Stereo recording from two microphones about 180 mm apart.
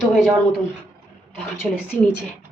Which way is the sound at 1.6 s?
Centre (ahead or behind).